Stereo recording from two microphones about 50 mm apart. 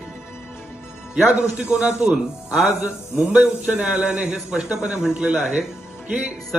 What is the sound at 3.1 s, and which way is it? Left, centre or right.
Speech, right.